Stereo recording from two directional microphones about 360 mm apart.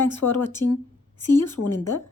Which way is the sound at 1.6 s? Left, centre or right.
Left.